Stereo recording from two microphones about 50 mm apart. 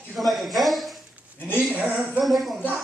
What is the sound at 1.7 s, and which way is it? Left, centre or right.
Speech, right.